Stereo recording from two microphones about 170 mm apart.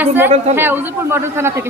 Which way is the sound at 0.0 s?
10° right (ahead or behind).